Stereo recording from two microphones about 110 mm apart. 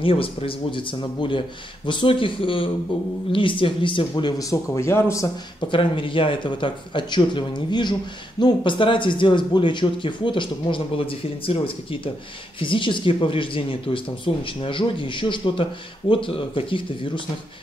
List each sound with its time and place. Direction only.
0.0 s speech: 55° left (ahead or behind)
4.1 s speech: 35° left (ahead or behind)
5.7 s speech: 50° left (ahead or behind)